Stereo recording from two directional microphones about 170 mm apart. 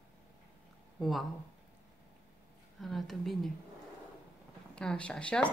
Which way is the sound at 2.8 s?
Centre (ahead or behind).